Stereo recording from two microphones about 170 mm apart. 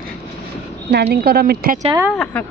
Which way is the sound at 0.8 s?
80° right.